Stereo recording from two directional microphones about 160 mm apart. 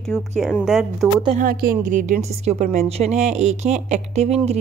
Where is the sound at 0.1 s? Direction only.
5° left (ahead or behind).